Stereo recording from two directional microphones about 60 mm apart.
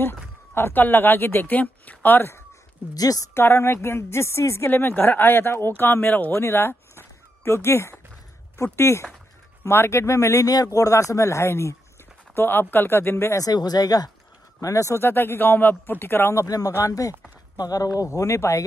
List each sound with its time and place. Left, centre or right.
0.0 s speech: left
2.9 s speech: left
3.3 s a woman's voice: left
4.6 s speech: left
6.3 s a sound: left
8.7 s a woman's voice: left
12.4 s speech: left
13.3 s speech: left
14.6 s a man's voice: left
15.0 s speech: left
16.3 s speech: left
16.7 s a man's voice: left
17.6 s speech: left